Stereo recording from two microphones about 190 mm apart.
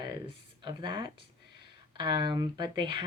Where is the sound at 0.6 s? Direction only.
25° right (ahead or behind).